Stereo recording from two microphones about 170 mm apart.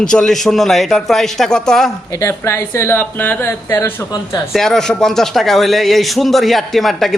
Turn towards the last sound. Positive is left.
turn(degrees=0)  # may be behind; listen again after turning